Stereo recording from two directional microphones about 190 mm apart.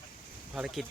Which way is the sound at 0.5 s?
5° right (ahead or behind).